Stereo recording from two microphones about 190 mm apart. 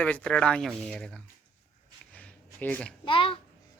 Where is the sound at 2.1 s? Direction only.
5° left (ahead or behind).